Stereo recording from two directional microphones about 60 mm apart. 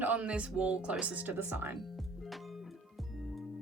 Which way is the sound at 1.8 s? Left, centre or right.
Centre.